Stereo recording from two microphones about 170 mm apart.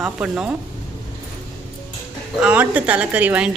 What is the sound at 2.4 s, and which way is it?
A woman's voice, 10° right (ahead or behind).